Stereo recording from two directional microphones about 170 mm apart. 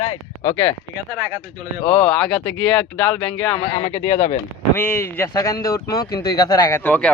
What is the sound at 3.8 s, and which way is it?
Speech, 40° left (ahead or behind).